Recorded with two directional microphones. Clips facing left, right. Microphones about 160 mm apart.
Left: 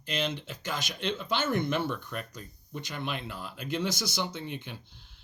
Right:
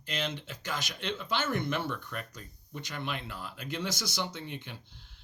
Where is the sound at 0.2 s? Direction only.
15° left (ahead or behind).